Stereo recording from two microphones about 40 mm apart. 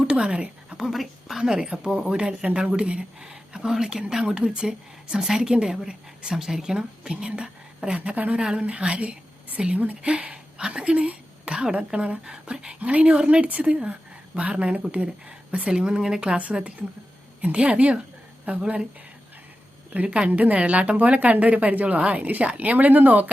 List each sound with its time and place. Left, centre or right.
0.2 s speech: right
0.8 s speech: centre
1.5 s speech: centre
7.9 s a woman's voice: right
8.4 s speech: right
8.6 s a woman's voice: right
10.1 s speech: right
12.8 s a woman's voice: right; by 16.2 s centre
16.2 s a woman's voice: right
19.9 s a woman's voice: right